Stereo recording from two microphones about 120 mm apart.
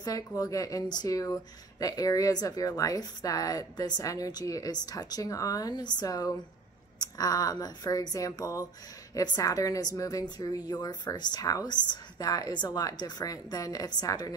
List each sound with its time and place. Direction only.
0.0 s a woman's voice: 30° left (ahead or behind)